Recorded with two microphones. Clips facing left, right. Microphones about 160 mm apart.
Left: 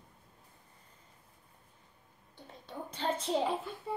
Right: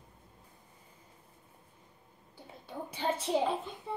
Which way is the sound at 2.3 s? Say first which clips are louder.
Right 1 dB; 10° right (ahead or behind).